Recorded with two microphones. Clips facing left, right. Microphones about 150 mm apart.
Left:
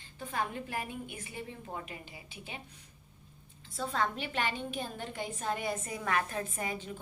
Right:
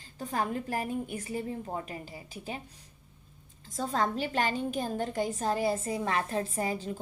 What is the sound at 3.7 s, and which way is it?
A woman's voice, 40° right (ahead or behind).